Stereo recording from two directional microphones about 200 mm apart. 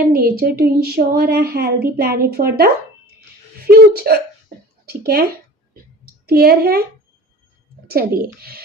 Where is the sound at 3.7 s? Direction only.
50° right (ahead or behind).